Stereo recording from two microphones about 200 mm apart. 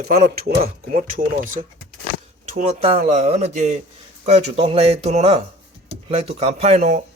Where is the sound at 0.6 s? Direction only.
35° right (ahead or behind).